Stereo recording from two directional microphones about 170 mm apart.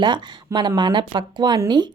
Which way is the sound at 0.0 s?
25° right (ahead or behind).